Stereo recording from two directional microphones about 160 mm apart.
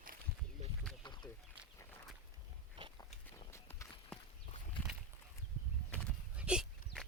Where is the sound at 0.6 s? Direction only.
45° right (ahead or behind).